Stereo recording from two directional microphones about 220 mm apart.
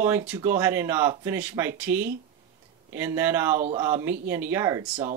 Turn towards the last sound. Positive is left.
turn(degrees=-10)  # may be behind; listen again after turning